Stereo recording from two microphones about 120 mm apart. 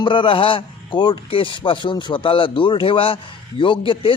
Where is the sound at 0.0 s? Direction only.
45° left (ahead or behind).